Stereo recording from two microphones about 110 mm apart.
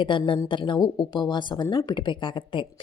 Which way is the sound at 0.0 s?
50° left (ahead or behind).